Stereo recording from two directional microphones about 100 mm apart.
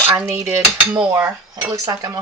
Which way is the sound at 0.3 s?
25° right (ahead or behind).